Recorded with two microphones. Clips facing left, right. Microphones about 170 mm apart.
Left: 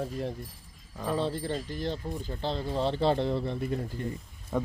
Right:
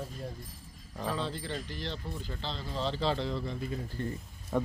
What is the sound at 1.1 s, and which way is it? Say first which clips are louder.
Speech: left 8 dB; 50° left (ahead or behind).